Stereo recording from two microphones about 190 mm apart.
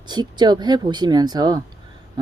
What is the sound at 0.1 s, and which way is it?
Speech, 20° right (ahead or behind).